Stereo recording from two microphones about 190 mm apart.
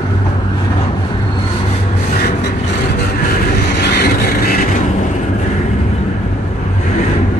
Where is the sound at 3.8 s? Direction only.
55° left (ahead or behind).